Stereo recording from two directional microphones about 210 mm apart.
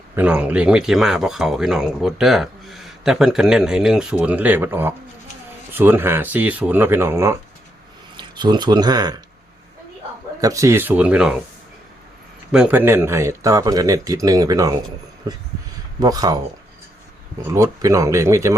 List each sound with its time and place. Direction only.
0.2 s speech: 5° right (ahead or behind)
10.4 s speech: 15° right (ahead or behind)
12.5 s speech: 5° right (ahead or behind)
16.0 s speech: 15° right (ahead or behind)
17.5 s speech: 15° right (ahead or behind)